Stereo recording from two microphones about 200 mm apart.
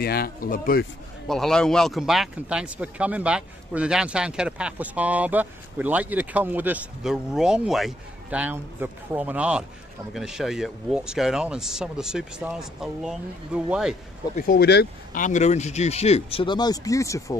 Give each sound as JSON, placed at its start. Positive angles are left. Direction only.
{"t": 0.0, "sound": "speech", "side_deg": 50}
{"t": 1.2, "sound": "speech", "side_deg": 0}
{"t": 14.3, "sound": "speech", "side_deg": 50}
{"t": 15.2, "sound": "speech", "side_deg": 35}